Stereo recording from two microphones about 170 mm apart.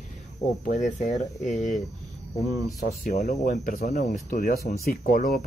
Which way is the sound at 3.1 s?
40° left (ahead or behind).